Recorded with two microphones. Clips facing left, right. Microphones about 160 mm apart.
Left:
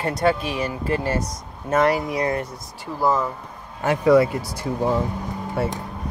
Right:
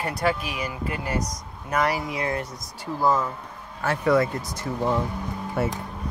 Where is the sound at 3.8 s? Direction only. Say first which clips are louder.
Left 5 dB; 10° left (ahead or behind).